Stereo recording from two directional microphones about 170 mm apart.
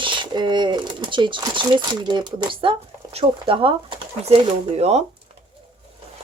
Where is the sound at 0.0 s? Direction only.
30° right (ahead or behind).